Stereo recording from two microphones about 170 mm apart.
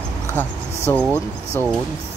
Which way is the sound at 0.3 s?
10° left (ahead or behind).